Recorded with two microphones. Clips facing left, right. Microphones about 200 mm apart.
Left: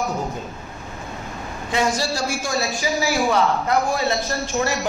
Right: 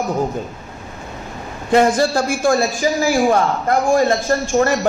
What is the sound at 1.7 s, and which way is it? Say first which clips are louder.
A man's voice: right 8 dB; 55° right (ahead or behind).